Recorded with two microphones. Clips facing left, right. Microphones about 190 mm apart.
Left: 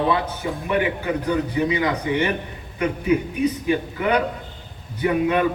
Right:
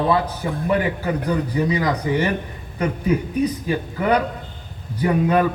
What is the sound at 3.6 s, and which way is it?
Speech, 35° right (ahead or behind).